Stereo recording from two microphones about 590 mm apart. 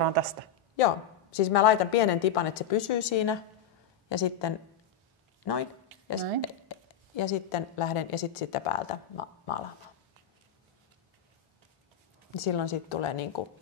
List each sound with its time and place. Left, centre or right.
0.7 s a woman's voice: left
12.4 s a woman's voice: left